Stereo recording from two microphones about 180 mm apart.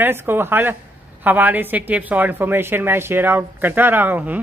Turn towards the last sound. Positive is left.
turn(degrees=-10)  # may be behind; listen again after turning